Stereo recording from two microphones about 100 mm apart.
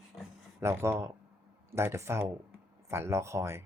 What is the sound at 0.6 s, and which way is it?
Speech, 25° right (ahead or behind).